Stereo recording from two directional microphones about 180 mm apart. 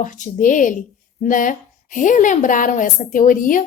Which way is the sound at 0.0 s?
45° left (ahead or behind).